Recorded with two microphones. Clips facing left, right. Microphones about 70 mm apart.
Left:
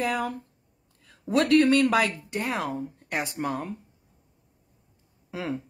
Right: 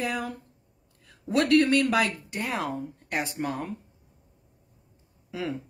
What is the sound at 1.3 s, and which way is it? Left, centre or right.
Speech, left.